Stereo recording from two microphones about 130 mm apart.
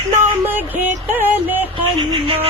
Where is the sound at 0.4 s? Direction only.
15° right (ahead or behind).